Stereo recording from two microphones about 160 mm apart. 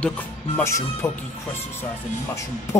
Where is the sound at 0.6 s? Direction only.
15° left (ahead or behind).